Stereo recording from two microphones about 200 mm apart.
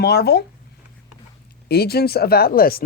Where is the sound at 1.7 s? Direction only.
50° left (ahead or behind).